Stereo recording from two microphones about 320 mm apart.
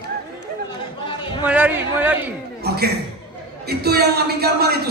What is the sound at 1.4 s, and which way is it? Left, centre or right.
Speech, centre.